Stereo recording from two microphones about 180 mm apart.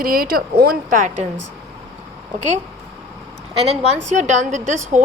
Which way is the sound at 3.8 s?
40° right (ahead or behind).